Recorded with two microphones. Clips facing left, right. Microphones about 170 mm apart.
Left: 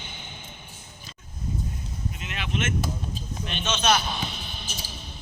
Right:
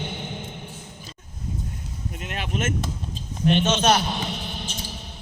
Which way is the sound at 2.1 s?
45° right (ahead or behind).